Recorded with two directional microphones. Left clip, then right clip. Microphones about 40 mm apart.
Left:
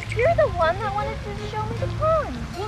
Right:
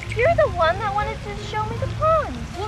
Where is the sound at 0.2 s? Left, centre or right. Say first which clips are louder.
Right 2 dB; centre.